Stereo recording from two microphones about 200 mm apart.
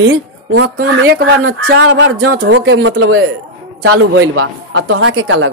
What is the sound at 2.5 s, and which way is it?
A woman's voice, 85° right.